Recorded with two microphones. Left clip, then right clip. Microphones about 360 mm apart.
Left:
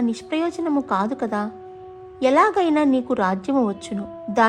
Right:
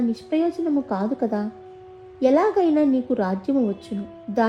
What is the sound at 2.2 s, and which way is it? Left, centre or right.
A woman's voice, centre.